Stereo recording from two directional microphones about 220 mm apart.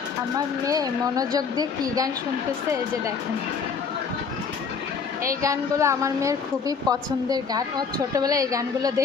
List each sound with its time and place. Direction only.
0.3 s a woman's voice: 15° right (ahead or behind)
5.4 s a woman's voice: 15° right (ahead or behind)